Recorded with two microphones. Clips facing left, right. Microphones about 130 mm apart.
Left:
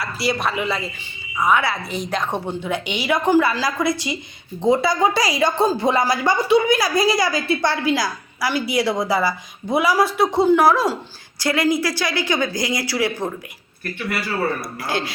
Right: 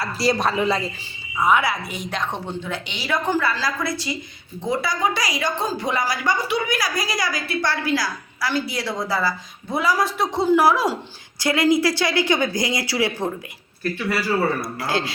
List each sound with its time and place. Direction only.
0.0 s a woman's voice: 35° right (ahead or behind)
1.4 s speech: 20° right (ahead or behind)
1.6 s a woman's voice: 35° left (ahead or behind)
2.0 s a woman's voice: 5° left (ahead or behind)
11.3 s speech: 20° right (ahead or behind)